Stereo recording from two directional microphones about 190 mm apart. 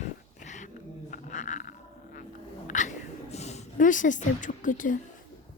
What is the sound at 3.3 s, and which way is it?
Speech, 35° left (ahead or behind).